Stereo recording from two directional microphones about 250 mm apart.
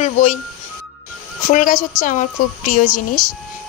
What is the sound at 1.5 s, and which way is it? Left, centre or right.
A woman's voice, left.